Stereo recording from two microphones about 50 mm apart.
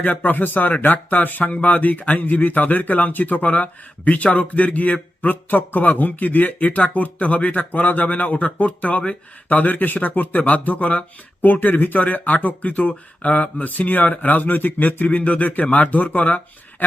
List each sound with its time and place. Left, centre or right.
0.0 s speech: left